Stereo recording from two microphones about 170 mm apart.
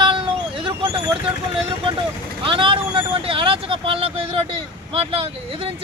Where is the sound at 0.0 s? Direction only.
30° right (ahead or behind).